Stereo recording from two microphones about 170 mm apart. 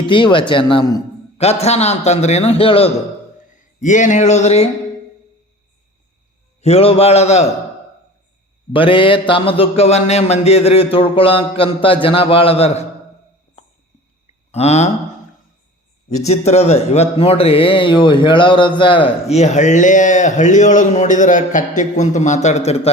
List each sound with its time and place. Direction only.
0.0 s a man's voice: 30° left (ahead or behind)
3.8 s speech: 45° left (ahead or behind)
6.6 s a man's voice: 35° left (ahead or behind)
8.7 s a man's voice: 30° left (ahead or behind)
14.5 s a man's voice: 40° left (ahead or behind)
16.0 s a man's voice: 45° left (ahead or behind)